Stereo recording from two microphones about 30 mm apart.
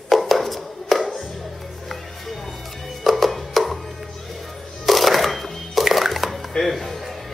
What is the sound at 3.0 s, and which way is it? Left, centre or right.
Music, centre.